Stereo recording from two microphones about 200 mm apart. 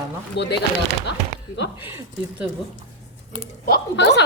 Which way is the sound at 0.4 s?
60° left (ahead or behind).